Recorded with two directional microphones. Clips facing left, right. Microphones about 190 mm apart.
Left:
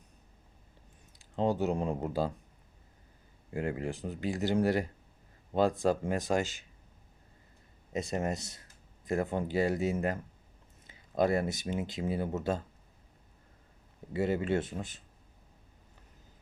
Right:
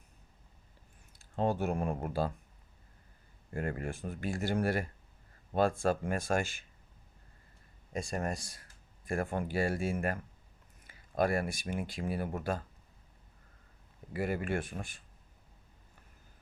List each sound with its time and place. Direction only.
1.2 s speech: 15° left (ahead or behind)
3.5 s speech: 15° left (ahead or behind)
7.9 s speech: 20° left (ahead or behind)
14.1 s speech: 25° left (ahead or behind)